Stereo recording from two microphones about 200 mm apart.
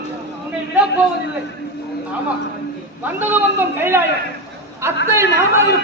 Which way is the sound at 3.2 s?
10° right (ahead or behind).